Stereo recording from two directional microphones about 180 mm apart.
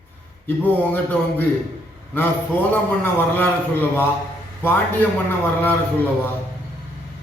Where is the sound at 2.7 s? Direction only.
10° left (ahead or behind).